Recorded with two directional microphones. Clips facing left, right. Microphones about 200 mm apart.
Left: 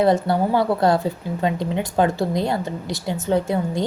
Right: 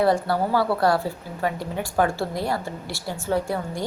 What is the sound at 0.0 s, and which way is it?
A woman's voice, 20° left (ahead or behind).